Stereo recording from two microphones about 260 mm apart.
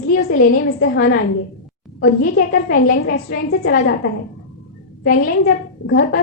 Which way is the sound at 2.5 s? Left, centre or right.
Left.